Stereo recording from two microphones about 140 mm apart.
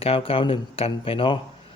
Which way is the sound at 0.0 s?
40° left (ahead or behind).